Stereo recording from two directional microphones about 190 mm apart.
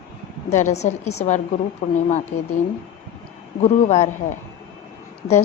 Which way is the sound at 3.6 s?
35° left (ahead or behind).